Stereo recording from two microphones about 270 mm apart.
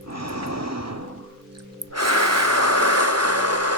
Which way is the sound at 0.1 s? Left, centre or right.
Right.